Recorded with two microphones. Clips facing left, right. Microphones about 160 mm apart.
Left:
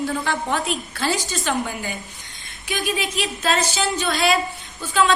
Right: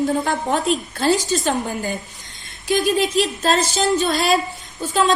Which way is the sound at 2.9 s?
40° right (ahead or behind).